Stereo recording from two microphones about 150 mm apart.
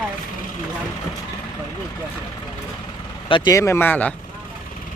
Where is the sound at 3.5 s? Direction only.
20° left (ahead or behind).